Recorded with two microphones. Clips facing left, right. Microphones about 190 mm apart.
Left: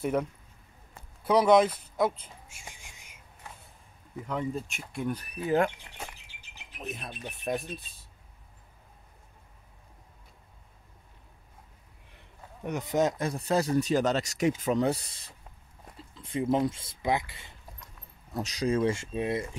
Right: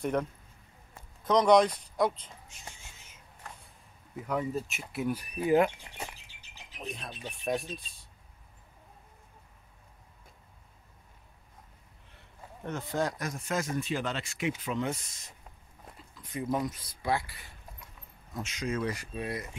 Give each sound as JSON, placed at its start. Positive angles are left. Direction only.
{"t": 0.0, "sound": "a man's voice", "side_deg": 5}
{"t": 1.2, "sound": "a sound", "side_deg": 5}
{"t": 4.3, "sound": "speech", "side_deg": -5}
{"t": 6.8, "sound": "speech", "side_deg": 5}
{"t": 12.6, "sound": "speech", "side_deg": 15}
{"t": 13.3, "sound": "speech", "side_deg": 35}
{"t": 18.3, "sound": "speech", "side_deg": 35}